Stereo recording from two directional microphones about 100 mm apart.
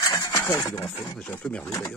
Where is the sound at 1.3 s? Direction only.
10° left (ahead or behind).